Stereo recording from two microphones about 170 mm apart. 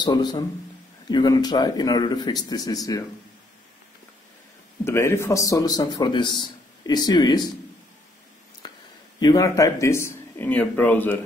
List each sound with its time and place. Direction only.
0.0 s speech: 25° left (ahead or behind)
4.8 s speech: 15° left (ahead or behind)
8.6 s a sound: 25° left (ahead or behind)
9.2 s speech: 20° left (ahead or behind)